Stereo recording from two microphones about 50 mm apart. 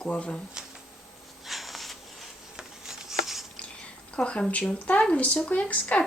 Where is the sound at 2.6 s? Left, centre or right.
Centre.